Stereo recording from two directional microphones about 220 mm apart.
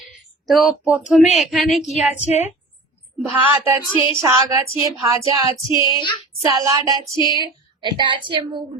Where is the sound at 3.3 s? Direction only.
10° right (ahead or behind).